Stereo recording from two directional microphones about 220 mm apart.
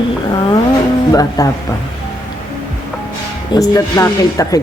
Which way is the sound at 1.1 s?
15° left (ahead or behind).